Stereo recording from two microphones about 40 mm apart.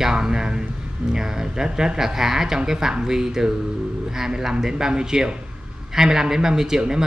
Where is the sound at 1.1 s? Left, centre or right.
Centre.